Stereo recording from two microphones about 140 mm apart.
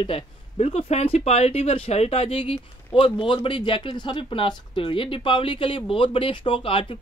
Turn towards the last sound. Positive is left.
turn(degrees=40)  # may be behind; listen again after turning